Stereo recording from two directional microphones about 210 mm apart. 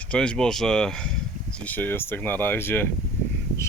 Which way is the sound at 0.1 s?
5° left (ahead or behind).